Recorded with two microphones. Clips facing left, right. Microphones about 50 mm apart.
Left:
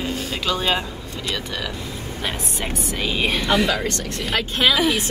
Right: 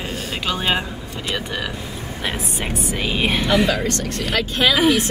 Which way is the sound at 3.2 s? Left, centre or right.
Centre.